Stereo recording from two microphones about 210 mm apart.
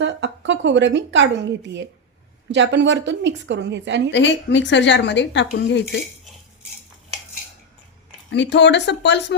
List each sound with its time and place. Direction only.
0.0 s a woman's voice: 60° right (ahead or behind)
2.5 s a woman's voice: 60° right (ahead or behind)
4.1 s speech: 60° left (ahead or behind)
8.3 s speech: 55° left (ahead or behind)